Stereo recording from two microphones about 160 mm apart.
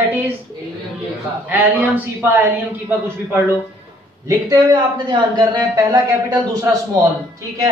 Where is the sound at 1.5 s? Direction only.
10° right (ahead or behind).